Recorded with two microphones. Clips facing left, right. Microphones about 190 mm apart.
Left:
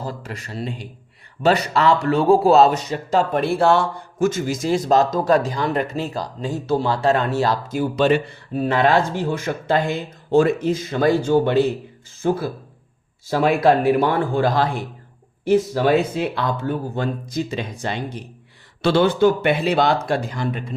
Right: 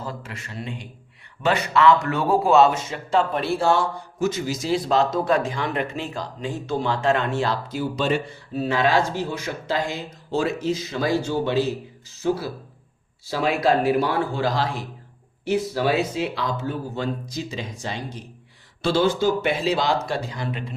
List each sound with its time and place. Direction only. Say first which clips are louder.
0.0 s a man's voice: left 3 dB; 40° left (ahead or behind)